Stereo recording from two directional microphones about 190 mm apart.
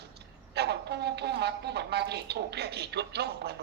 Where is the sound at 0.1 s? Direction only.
60° right (ahead or behind).